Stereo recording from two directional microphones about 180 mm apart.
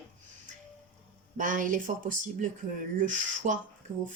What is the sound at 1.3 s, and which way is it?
Speech, 45° right (ahead or behind).